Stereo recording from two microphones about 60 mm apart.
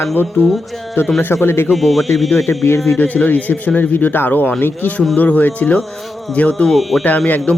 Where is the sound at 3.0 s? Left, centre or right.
Left.